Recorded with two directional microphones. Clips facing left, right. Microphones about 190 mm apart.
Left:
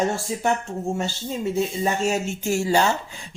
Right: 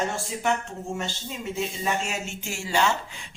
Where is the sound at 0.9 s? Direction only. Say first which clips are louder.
Left 6 dB; 35° left (ahead or behind).